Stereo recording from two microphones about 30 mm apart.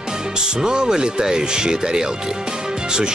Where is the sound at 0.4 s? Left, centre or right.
Right.